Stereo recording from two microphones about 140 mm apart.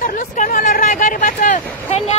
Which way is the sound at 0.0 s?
70° left (ahead or behind).